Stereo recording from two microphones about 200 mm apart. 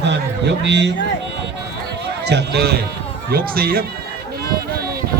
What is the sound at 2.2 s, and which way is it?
A man's voice, 55° right (ahead or behind).